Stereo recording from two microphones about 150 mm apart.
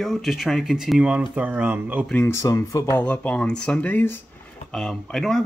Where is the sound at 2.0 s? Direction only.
15° left (ahead or behind).